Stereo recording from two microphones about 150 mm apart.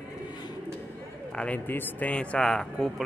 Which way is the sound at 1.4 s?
10° left (ahead or behind).